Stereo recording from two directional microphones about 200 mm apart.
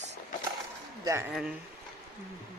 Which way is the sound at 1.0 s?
15° right (ahead or behind).